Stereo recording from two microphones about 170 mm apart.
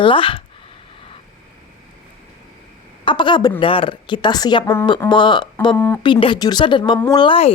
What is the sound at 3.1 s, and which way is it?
A woman's voice, 25° left (ahead or behind).